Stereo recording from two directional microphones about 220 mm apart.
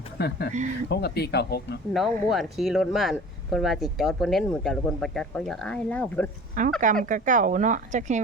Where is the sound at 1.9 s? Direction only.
Centre (ahead or behind).